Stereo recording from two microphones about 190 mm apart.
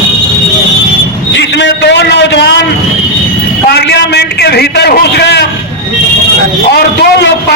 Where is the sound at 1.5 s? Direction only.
65° left (ahead or behind).